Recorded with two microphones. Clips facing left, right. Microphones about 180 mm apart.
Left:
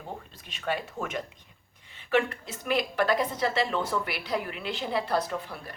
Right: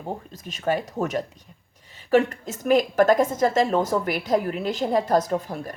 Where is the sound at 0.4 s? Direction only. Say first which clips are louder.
Right 7 dB; 40° right (ahead or behind).